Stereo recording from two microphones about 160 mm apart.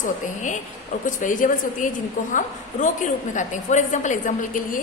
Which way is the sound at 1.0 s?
55° left (ahead or behind).